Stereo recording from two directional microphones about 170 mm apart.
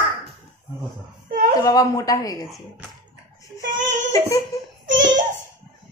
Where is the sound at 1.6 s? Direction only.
20° left (ahead or behind).